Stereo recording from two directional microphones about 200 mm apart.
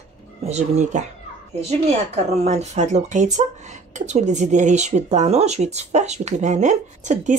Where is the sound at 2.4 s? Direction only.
35° right (ahead or behind).